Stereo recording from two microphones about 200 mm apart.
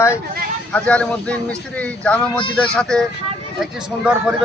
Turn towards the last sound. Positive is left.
turn(degrees=-5)  # may be behind; listen again after turning